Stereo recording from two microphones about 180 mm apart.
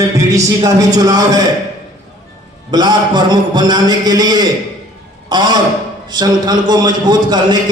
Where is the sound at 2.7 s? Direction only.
25° right (ahead or behind).